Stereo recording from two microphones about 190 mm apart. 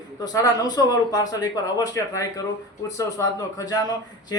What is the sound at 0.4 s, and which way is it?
A man's voice, 20° left (ahead or behind).